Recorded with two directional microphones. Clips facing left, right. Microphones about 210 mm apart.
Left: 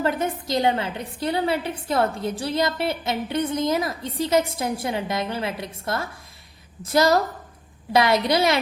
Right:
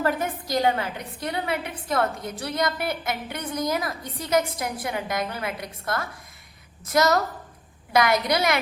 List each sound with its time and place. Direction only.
0.0 s a woman's voice: 25° left (ahead or behind)